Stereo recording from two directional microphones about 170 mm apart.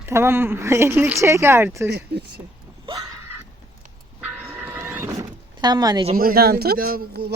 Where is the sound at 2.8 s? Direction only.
25° right (ahead or behind).